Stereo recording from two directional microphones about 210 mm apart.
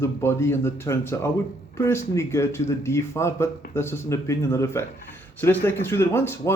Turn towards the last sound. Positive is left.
turn(degrees=10)  # may be behind; listen again after turning